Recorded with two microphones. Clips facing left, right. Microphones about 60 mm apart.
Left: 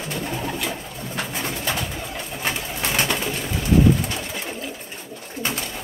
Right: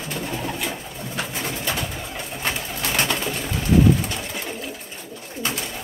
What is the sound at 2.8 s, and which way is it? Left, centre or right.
Bird, centre.